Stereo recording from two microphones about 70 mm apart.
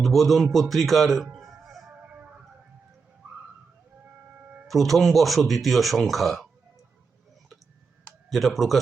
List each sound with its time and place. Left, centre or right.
0.0 s speech: centre
1.3 s music: centre
1.9 s guitar: right
4.4 s a sound: right
4.7 s speech: centre
8.3 s speech: centre